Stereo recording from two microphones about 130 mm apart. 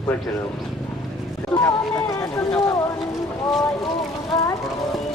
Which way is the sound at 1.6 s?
20° left (ahead or behind).